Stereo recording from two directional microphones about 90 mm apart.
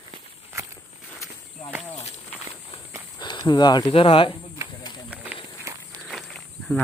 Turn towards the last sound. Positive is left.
turn(degrees=5)  # may be behind; listen again after turning